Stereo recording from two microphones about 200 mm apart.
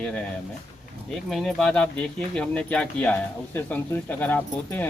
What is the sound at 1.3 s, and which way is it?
Speech, centre (ahead or behind).